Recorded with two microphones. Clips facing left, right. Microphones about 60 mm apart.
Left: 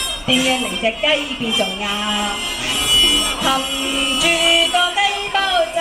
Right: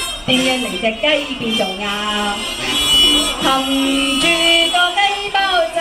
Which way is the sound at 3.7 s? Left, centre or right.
Centre.